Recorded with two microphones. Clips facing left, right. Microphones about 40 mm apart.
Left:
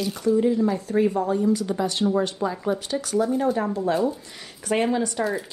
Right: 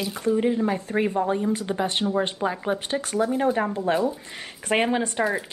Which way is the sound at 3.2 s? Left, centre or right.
Right.